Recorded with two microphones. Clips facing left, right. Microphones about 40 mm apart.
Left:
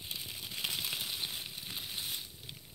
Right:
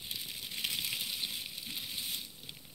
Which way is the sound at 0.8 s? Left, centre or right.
Centre.